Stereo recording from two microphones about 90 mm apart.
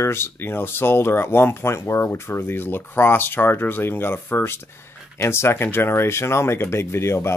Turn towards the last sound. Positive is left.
turn(degrees=30)  # may be behind; listen again after turning